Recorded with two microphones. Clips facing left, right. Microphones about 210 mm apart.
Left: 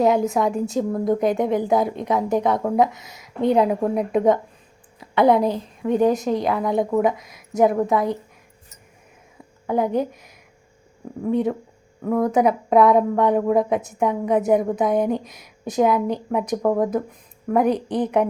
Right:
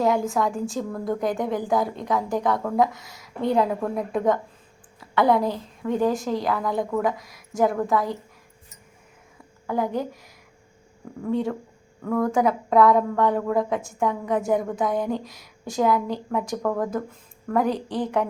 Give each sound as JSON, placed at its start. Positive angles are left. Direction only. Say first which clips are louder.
{"t": 0.0, "sound": "a woman's voice", "louder": "left 4 dB", "side_deg": 20}
{"t": 9.6, "sound": "a woman's voice", "louder": "left 4 dB", "side_deg": 20}